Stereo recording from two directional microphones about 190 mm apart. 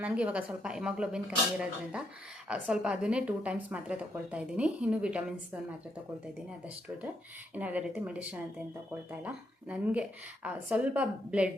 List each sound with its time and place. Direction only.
0.0 s a woman's voice: 5° right (ahead or behind)
7.5 s a woman's voice: 10° right (ahead or behind)